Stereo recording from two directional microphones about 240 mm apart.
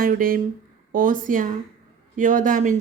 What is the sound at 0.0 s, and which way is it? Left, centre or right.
A woman's voice, right.